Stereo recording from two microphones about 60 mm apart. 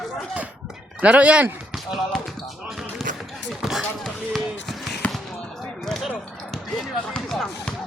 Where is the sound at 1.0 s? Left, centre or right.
Right.